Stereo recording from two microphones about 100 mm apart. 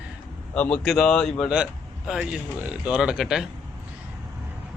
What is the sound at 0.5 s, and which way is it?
Speech, 15° left (ahead or behind).